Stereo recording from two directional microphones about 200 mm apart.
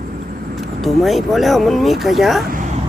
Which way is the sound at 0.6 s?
Centre (ahead or behind).